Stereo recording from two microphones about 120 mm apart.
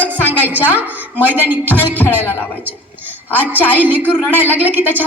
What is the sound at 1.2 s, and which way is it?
Speech, 15° right (ahead or behind).